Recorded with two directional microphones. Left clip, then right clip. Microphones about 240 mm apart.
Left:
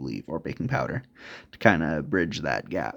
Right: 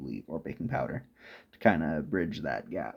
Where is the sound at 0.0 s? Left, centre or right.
Left.